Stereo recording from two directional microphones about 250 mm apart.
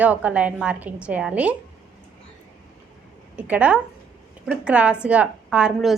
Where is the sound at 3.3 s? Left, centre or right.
Centre.